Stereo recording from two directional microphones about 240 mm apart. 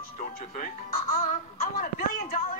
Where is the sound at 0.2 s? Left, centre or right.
Left.